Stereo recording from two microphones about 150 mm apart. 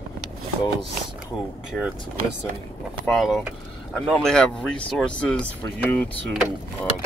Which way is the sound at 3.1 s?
Centre (ahead or behind).